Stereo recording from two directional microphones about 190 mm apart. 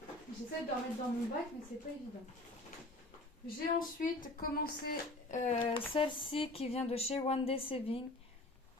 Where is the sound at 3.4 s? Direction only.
45° left (ahead or behind).